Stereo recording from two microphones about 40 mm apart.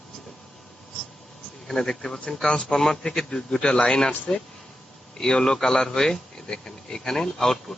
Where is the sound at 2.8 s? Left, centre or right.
Centre.